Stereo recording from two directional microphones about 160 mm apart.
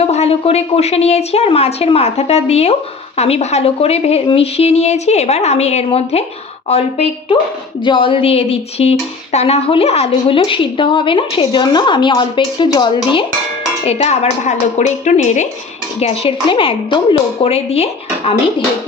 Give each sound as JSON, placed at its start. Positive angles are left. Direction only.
{"t": 0.0, "sound": "speech", "side_deg": 40}
{"t": 13.8, "sound": "speech", "side_deg": 40}